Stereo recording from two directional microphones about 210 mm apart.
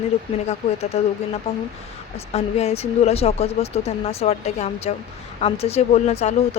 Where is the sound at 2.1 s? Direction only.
30° left (ahead or behind).